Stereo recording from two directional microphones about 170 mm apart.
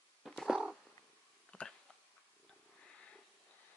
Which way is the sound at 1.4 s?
5° left (ahead or behind).